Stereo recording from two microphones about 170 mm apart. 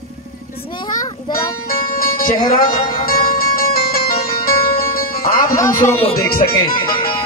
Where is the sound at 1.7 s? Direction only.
55° left (ahead or behind).